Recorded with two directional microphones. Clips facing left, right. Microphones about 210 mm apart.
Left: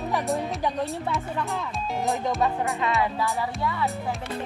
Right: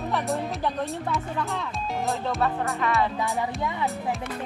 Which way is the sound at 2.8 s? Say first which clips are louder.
Right 1 dB; 15° left (ahead or behind).